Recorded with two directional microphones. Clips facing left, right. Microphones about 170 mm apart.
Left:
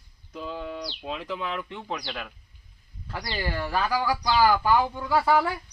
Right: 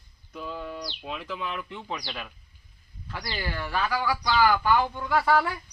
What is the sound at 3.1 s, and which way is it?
Speech, 15° left (ahead or behind).